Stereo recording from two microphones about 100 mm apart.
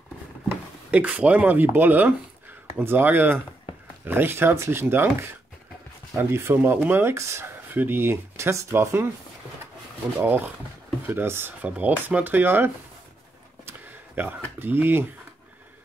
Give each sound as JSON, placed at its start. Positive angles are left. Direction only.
{"t": 0.5, "sound": "speech", "side_deg": -15}
{"t": 10.1, "sound": "speech", "side_deg": -20}